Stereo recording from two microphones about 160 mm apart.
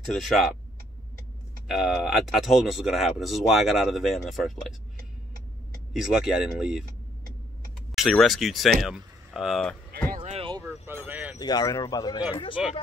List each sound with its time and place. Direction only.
0.1 s speech: centre (ahead or behind)
1.7 s speech: 5° right (ahead or behind)
5.9 s speech: centre (ahead or behind)
7.9 s speech: centre (ahead or behind)
8.8 s a sound: centre (ahead or behind)
10.3 s basketball bounce: 35° right (ahead or behind)
11.1 s a sound: 10° right (ahead or behind)
11.3 s speech: 25° left (ahead or behind)
12.6 s speech: 5° right (ahead or behind)